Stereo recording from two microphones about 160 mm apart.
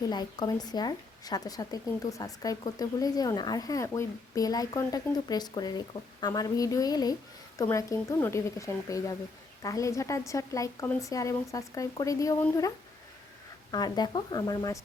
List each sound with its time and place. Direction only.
0.0 s speech: 25° left (ahead or behind)
13.7 s speech: 25° left (ahead or behind)